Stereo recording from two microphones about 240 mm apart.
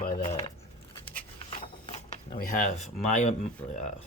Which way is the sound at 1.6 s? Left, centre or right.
Left.